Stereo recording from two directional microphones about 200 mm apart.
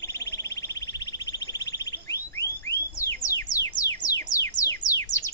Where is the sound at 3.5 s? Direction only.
15° left (ahead or behind).